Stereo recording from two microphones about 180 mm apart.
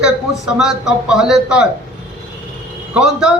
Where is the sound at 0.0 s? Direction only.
5° right (ahead or behind).